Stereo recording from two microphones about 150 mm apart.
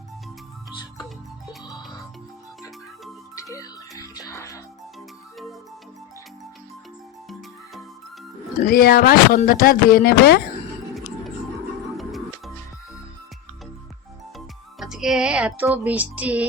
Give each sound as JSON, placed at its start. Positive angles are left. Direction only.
{"t": 3.3, "sound": "music", "side_deg": 20}
{"t": 8.6, "sound": "music", "side_deg": 80}
{"t": 9.5, "sound": "music", "side_deg": 70}
{"t": 14.3, "sound": "music", "side_deg": 0}